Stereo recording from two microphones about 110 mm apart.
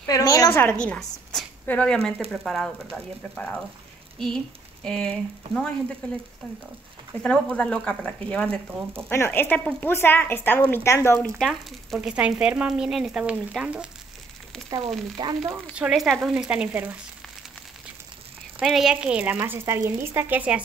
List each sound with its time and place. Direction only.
0.0 s a woman's voice: 30° left (ahead or behind)
0.7 s speech: 10° left (ahead or behind)
7.2 s speech: 10° left (ahead or behind)
11.2 s speech: 5° left (ahead or behind)
12.1 s a woman's voice: 10° right (ahead or behind)
15.2 s speech: 40° right (ahead or behind)
15.7 s a woman's voice: 5° right (ahead or behind)
18.6 s a woman's voice: 5° right (ahead or behind)